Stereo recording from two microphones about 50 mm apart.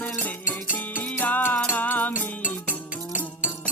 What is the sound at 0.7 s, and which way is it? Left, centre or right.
Music, left.